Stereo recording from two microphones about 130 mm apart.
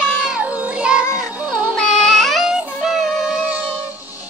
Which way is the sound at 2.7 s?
5° right (ahead or behind).